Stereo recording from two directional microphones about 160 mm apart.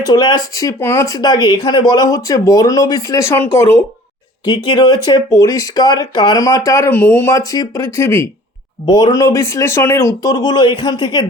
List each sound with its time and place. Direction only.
0.0 s speech: 25° left (ahead or behind)
4.4 s speech: 30° left (ahead or behind)